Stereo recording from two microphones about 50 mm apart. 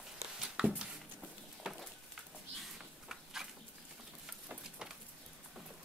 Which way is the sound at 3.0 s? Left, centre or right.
Centre.